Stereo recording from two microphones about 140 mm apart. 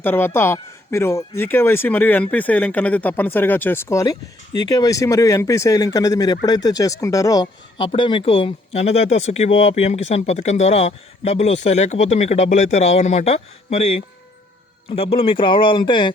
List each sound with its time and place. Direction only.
0.0 s speech: 15° left (ahead or behind); by 16.1 s 35° left (ahead or behind)